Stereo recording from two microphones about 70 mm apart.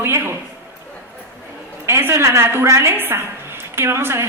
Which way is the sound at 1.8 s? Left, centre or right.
Right.